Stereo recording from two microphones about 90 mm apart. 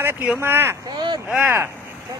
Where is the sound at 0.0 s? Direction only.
20° right (ahead or behind).